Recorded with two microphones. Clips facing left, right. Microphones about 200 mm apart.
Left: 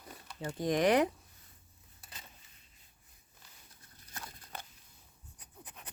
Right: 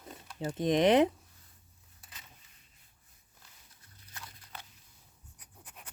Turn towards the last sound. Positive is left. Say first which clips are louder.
# left 3 dB
turn(degrees=50)  # may be behind; listen again after turning